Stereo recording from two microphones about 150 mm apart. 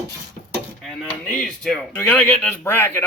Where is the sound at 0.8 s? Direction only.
Centre (ahead or behind).